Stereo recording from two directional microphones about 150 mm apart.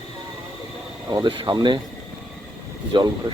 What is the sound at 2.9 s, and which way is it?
Speech, 30° right (ahead or behind).